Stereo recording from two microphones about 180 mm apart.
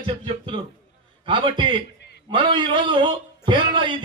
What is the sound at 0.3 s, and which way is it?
A man's voice, 30° right (ahead or behind).